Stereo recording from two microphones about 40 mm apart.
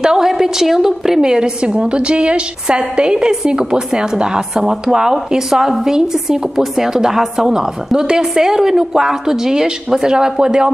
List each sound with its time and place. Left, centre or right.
0.0 s a woman's voice: centre